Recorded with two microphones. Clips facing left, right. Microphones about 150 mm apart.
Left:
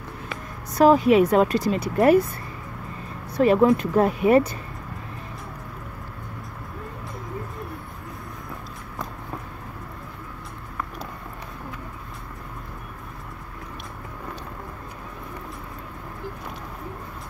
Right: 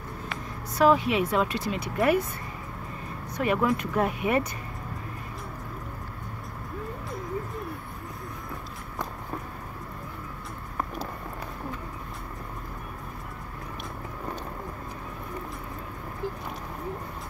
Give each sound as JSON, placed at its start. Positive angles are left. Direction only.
{"t": 0.7, "sound": "speech", "side_deg": 40}